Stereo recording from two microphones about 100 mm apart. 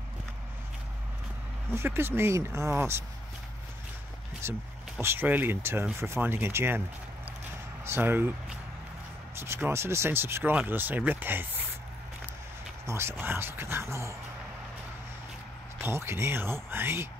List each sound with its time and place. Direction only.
1.7 s speech: 25° right (ahead or behind)
4.4 s speech: 25° right (ahead or behind)
7.8 s speech: 25° right (ahead or behind)
12.8 s speech: 25° right (ahead or behind)
15.8 s speech: 25° right (ahead or behind)